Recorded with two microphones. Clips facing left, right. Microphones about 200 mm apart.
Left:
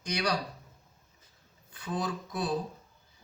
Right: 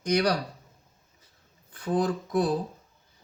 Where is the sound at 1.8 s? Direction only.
55° right (ahead or behind).